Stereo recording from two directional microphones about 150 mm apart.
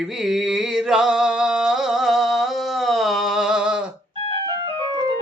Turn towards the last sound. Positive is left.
turn(degrees=-5)  # may be behind; listen again after turning